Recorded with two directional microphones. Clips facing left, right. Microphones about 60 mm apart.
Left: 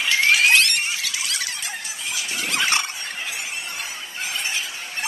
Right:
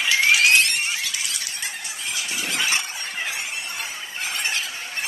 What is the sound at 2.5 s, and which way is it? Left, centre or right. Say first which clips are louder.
Squeal: left 3 dB; left.